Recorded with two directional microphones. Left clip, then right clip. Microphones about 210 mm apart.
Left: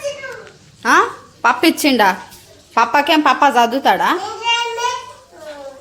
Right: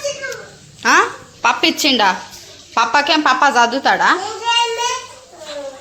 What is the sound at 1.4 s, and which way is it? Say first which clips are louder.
A woman's voice: left 1 dB; 25° left (ahead or behind).